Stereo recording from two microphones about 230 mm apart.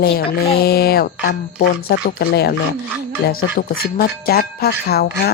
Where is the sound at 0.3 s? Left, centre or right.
Left.